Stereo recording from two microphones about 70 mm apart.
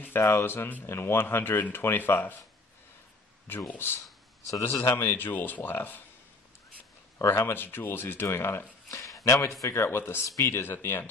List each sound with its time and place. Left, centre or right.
0.4 s speech: left
3.4 s speech: left
7.2 s speech: left
8.9 s a sound: left
9.7 s speech: left
10.2 s speech: left
10.5 s speech: left